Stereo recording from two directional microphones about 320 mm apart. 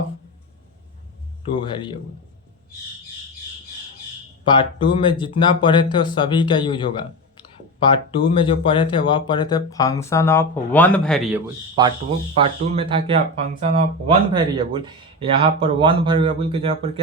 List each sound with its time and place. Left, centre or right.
4.4 s speech: centre
11.8 s speech: centre